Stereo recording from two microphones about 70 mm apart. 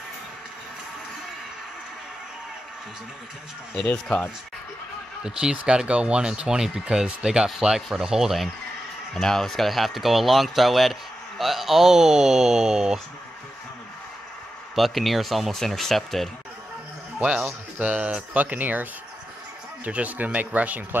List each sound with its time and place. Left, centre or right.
5.2 s speech: centre
9.1 s speech: centre
14.8 s speech: centre
17.7 s speech: right